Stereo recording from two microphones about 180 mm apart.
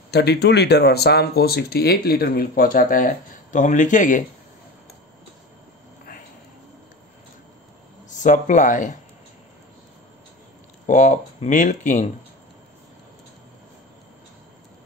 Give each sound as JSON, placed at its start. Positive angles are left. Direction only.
{"t": 0.1, "sound": "speech", "side_deg": 65}
{"t": 8.1, "sound": "speech", "side_deg": 45}
{"t": 10.9, "sound": "speech", "side_deg": 45}